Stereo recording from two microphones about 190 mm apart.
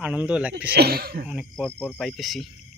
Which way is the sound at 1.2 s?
5° right (ahead or behind).